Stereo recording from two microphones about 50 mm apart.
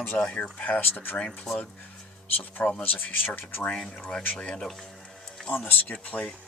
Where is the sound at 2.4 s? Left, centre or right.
Left.